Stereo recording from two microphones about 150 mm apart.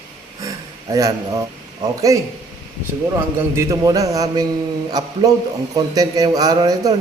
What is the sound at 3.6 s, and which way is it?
Speech, 20° right (ahead or behind).